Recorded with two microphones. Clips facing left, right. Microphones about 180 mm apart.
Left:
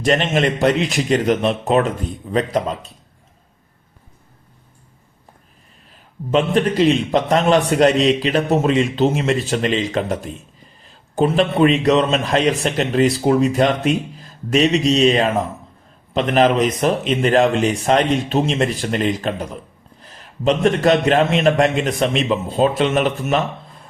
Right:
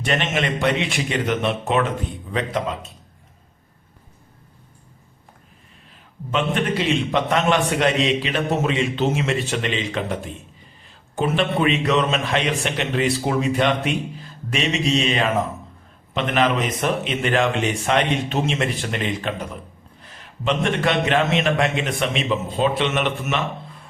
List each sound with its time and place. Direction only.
0.0 s a man's voice: 40° left (ahead or behind)
6.3 s a man's voice: 35° left (ahead or behind)